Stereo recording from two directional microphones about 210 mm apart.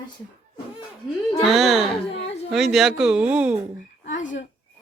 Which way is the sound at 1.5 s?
Centre (ahead or behind).